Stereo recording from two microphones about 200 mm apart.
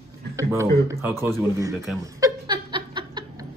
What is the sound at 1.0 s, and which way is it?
Speech, 15° right (ahead or behind).